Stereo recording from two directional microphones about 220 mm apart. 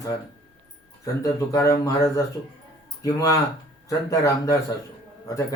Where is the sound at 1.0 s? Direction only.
15° left (ahead or behind).